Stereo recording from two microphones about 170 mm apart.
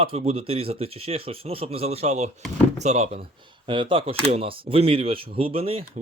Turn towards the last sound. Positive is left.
turn(degrees=-35)  # may be behind; listen again after turning